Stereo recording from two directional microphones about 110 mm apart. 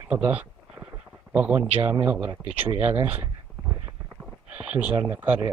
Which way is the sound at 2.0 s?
15° right (ahead or behind).